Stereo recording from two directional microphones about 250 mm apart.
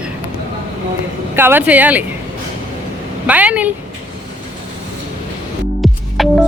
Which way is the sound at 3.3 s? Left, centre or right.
Centre.